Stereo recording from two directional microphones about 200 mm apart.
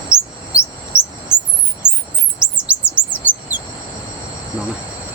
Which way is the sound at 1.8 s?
5° right (ahead or behind).